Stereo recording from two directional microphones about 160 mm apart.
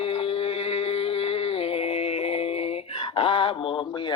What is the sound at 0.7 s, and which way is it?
Music, 35° left (ahead or behind).